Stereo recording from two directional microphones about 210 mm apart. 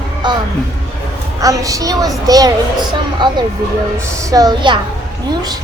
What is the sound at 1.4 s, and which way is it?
A woman's voice, 15° right (ahead or behind).